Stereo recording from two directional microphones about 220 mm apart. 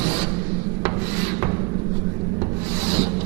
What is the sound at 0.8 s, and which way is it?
Rub, 15° right (ahead or behind).